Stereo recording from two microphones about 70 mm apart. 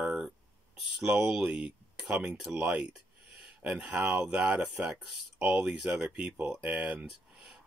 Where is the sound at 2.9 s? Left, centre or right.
Centre.